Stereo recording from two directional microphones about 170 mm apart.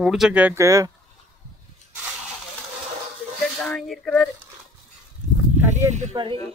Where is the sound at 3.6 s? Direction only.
Centre (ahead or behind).